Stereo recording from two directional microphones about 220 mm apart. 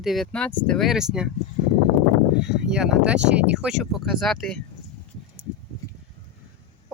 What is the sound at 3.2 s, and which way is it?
Speech, 50° right (ahead or behind).